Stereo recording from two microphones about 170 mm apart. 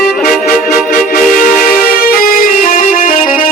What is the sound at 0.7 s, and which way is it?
Music, 55° left (ahead or behind).